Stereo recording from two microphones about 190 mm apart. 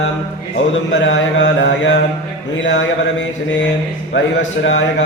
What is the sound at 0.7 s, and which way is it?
Mantra, 75° left (ahead or behind).